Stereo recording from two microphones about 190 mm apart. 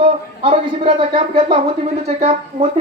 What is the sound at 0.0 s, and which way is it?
Speech, 30° right (ahead or behind).